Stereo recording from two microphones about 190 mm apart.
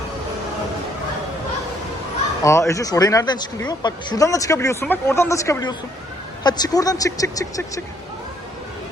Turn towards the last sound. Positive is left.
turn(degrees=20)  # may be behind; listen again after turning